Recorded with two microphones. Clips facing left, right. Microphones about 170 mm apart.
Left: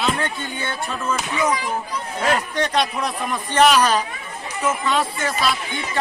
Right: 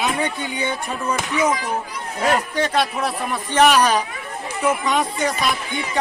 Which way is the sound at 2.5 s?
5° right (ahead or behind).